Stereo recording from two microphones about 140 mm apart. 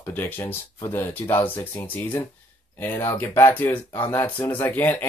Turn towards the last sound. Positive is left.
turn(degrees=10)  # may be behind; listen again after turning